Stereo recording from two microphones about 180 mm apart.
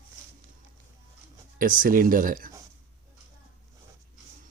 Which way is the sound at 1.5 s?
50° right (ahead or behind).